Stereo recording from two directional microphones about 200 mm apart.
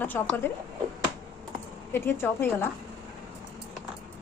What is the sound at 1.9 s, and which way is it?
Speech, 10° left (ahead or behind).